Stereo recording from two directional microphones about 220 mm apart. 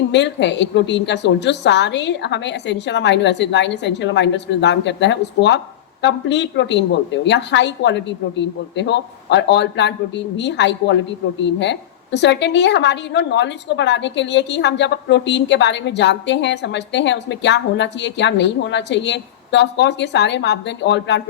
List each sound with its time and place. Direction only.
0.1 s a woman's voice: 55° left (ahead or behind)